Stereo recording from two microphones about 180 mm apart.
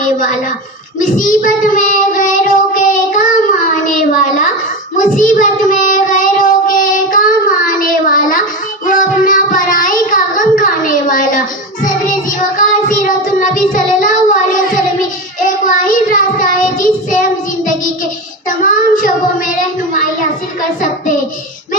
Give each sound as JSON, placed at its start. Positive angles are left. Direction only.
{"t": 0.0, "sound": "a woman's voice", "side_deg": 45}
{"t": 0.9, "sound": "child singing", "side_deg": 45}
{"t": 3.8, "sound": "a sound", "side_deg": 45}
{"t": 4.9, "sound": "child singing", "side_deg": 45}